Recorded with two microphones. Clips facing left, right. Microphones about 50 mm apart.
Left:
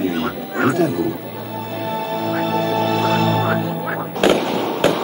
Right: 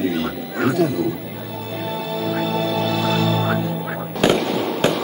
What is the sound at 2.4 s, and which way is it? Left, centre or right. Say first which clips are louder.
Music: left 3 dB; left.